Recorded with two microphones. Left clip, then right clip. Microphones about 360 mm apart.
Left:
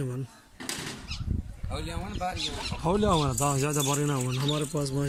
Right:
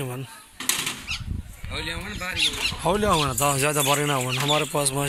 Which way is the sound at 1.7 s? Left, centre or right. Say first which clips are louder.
Right 6 dB; centre.